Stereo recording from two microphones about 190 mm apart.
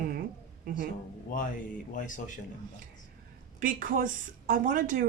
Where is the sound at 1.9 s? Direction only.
45° left (ahead or behind).